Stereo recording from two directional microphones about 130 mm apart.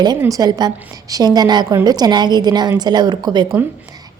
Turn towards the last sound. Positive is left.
turn(degrees=-35)  # may be behind; listen again after turning